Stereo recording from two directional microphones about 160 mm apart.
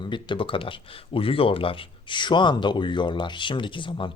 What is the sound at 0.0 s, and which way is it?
Speech, 30° left (ahead or behind).